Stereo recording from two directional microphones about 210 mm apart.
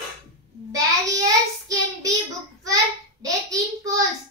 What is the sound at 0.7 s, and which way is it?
Child singing, 15° right (ahead or behind).